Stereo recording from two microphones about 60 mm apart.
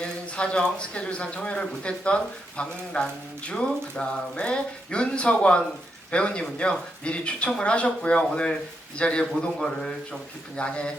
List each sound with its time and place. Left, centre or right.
0.0 s a man's voice: centre